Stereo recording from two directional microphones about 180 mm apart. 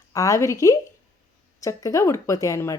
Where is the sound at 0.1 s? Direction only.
20° left (ahead or behind).